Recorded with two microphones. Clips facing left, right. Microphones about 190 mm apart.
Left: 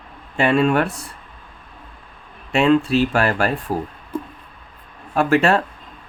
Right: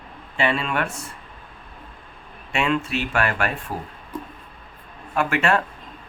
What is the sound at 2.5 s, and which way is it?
Speech, 35° left (ahead or behind).